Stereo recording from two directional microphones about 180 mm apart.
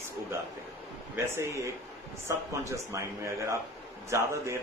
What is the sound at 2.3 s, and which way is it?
A man's voice, 15° right (ahead or behind).